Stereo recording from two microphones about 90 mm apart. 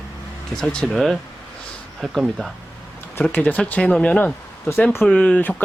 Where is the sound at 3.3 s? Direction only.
15° left (ahead or behind).